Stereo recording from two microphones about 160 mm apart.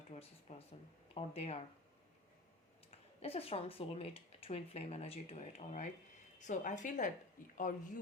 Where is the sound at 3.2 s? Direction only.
35° left (ahead or behind).